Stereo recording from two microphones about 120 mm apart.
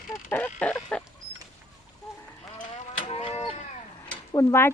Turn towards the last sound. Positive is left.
turn(degrees=20)  # may be behind; listen again after turning